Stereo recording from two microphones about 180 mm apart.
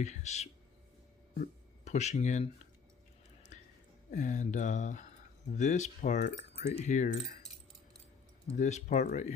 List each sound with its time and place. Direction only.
0.0 s speech: 40° left (ahead or behind)
4.1 s speech: 45° left (ahead or behind)
8.5 s speech: 40° left (ahead or behind)